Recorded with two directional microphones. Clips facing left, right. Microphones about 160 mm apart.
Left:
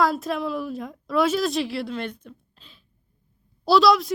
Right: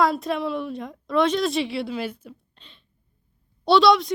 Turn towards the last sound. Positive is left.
turn(degrees=0)  # may be behind; listen again after turning